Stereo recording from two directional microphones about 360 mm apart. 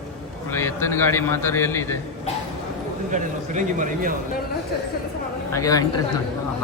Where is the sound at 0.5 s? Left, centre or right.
Centre.